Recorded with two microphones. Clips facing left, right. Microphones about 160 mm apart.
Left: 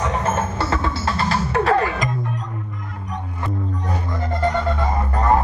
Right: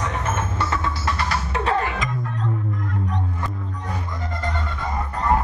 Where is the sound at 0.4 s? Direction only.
30° left (ahead or behind).